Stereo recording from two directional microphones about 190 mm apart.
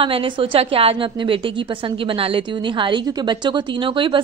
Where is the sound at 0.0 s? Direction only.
30° right (ahead or behind).